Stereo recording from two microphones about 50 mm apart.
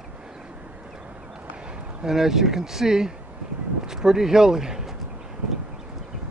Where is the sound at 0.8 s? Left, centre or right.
Centre.